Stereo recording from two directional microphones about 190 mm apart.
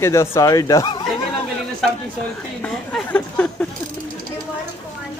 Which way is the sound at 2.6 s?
5° left (ahead or behind).